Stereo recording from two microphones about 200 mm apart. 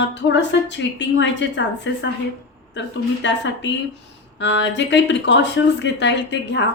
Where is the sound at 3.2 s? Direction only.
65° left (ahead or behind).